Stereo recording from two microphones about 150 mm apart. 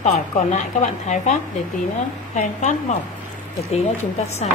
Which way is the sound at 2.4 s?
50° left (ahead or behind).